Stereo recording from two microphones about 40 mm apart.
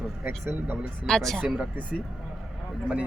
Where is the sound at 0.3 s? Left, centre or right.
Right.